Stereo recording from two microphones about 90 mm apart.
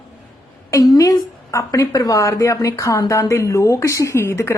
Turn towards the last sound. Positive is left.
turn(degrees=30)  # may be behind; listen again after turning